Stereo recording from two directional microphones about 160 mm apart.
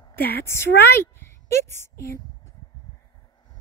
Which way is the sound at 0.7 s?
85° left.